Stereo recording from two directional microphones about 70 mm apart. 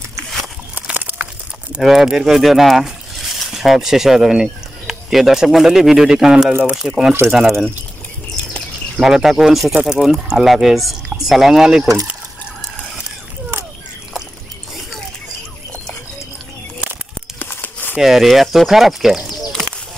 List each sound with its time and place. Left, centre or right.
0.8 s crumpling: right
1.8 s speech: centre
7.2 s speech: centre
9.0 s speech: centre
17.4 s crumpling: left
17.9 s speech: centre